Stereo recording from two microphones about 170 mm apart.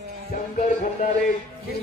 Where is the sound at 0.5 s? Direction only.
45° left (ahead or behind).